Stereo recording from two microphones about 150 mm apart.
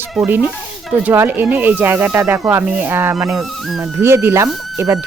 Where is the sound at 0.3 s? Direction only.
15° right (ahead or behind).